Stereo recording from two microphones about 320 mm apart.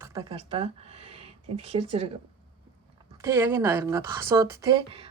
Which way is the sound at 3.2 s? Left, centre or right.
Centre.